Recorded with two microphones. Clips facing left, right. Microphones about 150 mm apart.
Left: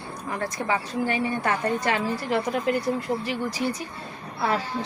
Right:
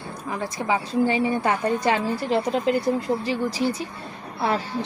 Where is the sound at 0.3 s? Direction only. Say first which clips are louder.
Right 2 dB; 10° right (ahead or behind).